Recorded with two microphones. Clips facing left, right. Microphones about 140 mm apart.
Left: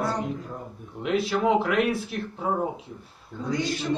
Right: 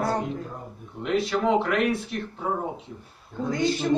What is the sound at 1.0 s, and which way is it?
Speech, 5° left (ahead or behind).